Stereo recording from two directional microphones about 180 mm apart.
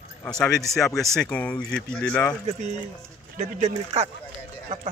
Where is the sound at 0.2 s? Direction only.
5° left (ahead or behind).